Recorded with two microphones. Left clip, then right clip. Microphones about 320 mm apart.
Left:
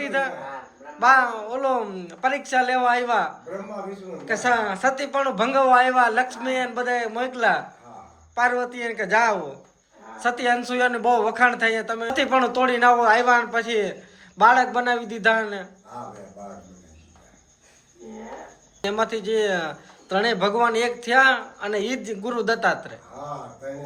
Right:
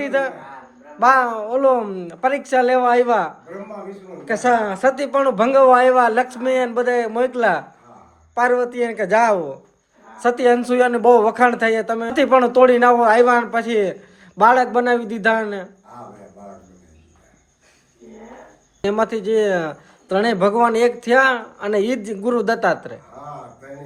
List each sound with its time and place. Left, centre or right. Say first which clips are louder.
0.0 s a man's voice: right 4 dB; centre
18.8 s a man's voice: right 5 dB; centre